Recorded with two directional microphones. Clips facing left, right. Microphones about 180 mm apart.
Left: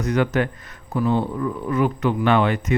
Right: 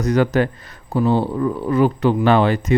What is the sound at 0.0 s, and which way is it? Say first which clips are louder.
Speech: right 4 dB; 35° right (ahead or behind).